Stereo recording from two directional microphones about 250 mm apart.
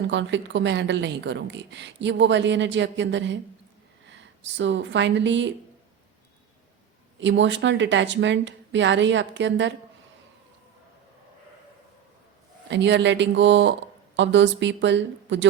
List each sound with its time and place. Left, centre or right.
0.1 s a woman's voice: right
7.2 s a woman's voice: right
12.6 s a woman's voice: right